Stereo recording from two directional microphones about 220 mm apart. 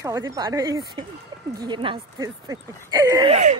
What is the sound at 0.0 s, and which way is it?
Speech, 15° right (ahead or behind).